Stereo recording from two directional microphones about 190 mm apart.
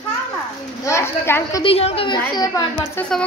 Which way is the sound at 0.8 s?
15° left (ahead or behind).